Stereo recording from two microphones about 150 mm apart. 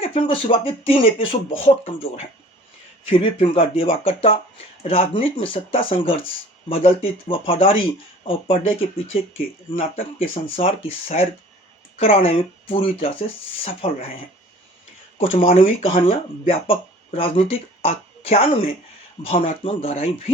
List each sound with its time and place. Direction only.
0.0 s speech: 40° left (ahead or behind)
9.7 s speech: 40° left (ahead or behind)
15.2 s speech: 40° left (ahead or behind)